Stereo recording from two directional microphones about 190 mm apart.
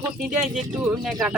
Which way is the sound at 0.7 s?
Centre (ahead or behind).